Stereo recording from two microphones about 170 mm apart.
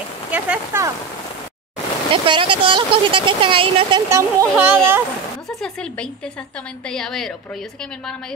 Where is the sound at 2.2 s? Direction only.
30° right (ahead or behind).